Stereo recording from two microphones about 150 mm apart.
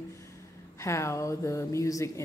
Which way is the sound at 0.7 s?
20° left (ahead or behind).